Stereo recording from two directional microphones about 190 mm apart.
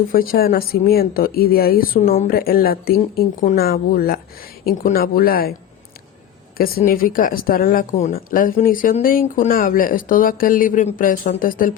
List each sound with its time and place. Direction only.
0.1 s speech: 50° left (ahead or behind)
6.6 s speech: 50° left (ahead or behind)